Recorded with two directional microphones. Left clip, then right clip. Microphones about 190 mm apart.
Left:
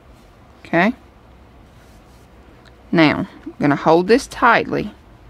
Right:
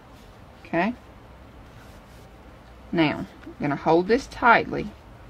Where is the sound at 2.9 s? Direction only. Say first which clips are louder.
Left 9 dB; 50° left (ahead or behind).